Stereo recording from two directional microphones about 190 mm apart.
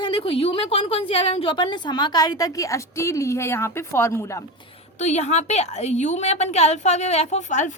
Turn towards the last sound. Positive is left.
turn(degrees=40)  # may be behind; listen again after turning